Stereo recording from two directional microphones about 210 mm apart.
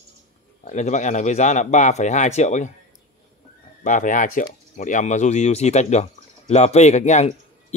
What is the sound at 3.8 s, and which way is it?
Speech, 35° left (ahead or behind).